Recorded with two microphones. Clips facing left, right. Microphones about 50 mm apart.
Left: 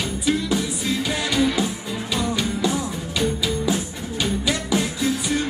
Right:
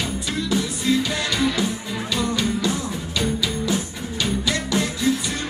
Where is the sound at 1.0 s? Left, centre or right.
Centre.